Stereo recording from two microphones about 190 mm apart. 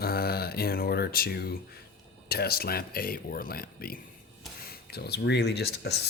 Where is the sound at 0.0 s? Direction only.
55° left (ahead or behind).